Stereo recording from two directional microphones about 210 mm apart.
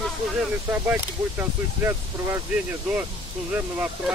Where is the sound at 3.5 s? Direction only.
10° right (ahead or behind).